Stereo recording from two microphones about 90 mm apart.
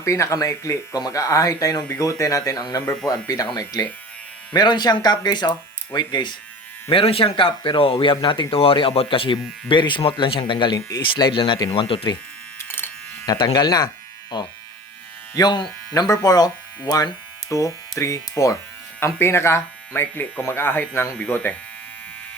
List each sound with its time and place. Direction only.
0.0 s speech: 35° left (ahead or behind)
4.5 s speech: 55° left (ahead or behind)
6.9 s speech: 90° left
9.6 s speech: 60° left (ahead or behind)
10.8 s speech: 40° left (ahead or behind)
11.0 s speech: 65° left (ahead or behind)
11.7 s speech: 90° left
12.5 s electric shaver: 20° left (ahead or behind)
13.3 s speech: 55° left (ahead or behind); by 21.5 s 20° left (ahead or behind)